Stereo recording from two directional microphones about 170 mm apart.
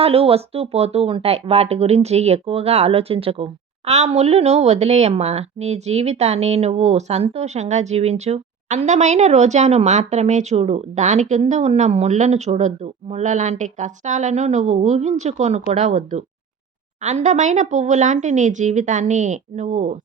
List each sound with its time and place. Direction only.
0.0 s speech: 35° right (ahead or behind)